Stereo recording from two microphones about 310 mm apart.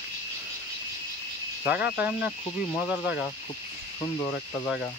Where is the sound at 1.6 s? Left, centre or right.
Centre.